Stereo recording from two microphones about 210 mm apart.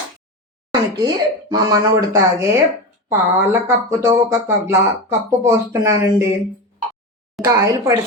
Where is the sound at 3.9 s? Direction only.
15° right (ahead or behind).